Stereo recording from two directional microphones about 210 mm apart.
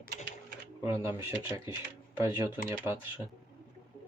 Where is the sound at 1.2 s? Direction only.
15° right (ahead or behind).